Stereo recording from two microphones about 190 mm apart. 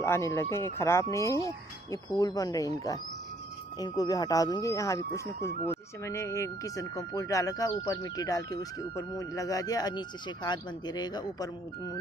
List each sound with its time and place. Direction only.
0.0 s speech: 15° left (ahead or behind)